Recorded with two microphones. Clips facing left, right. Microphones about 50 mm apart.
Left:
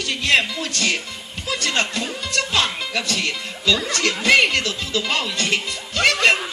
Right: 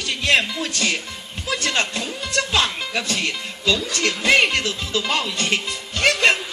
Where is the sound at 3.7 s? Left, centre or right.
Left.